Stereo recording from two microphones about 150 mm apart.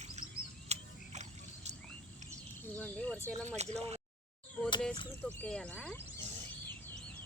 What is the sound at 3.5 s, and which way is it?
Speech, 45° right (ahead or behind).